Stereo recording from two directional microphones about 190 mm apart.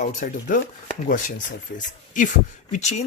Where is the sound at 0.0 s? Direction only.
40° left (ahead or behind).